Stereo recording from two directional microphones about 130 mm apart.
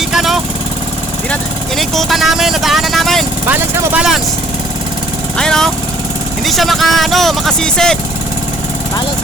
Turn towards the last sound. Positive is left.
turn(degrees=5)  # may be behind; listen again after turning